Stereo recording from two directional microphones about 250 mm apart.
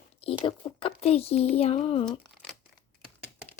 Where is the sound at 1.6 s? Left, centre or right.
Left.